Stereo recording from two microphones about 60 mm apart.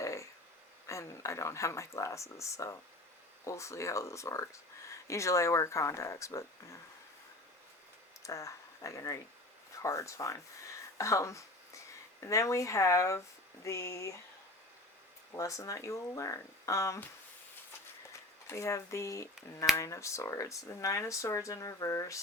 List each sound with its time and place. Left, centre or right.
0.0 s a sound: left
0.9 s speech: left
8.2 s speech: left
10.9 s a sound: left
12.2 s speech: left
15.3 s speech: left
18.4 s speech: left